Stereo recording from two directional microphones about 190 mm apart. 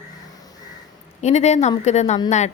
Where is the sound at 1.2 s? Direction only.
35° left (ahead or behind).